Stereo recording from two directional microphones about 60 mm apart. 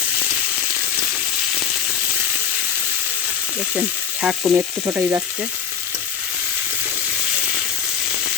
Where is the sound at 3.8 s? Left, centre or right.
Centre.